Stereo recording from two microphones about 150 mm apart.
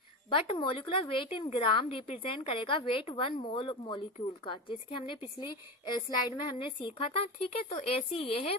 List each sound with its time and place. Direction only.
0.3 s a woman's voice: 35° left (ahead or behind)